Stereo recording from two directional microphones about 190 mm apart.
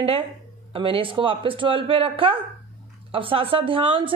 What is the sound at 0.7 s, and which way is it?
A man's voice, 30° right (ahead or behind).